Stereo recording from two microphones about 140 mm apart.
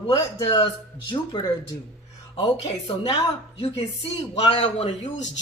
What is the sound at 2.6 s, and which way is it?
A woman's voice, 45° left (ahead or behind).